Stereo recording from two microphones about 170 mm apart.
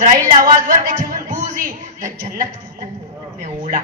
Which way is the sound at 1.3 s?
50° right (ahead or behind).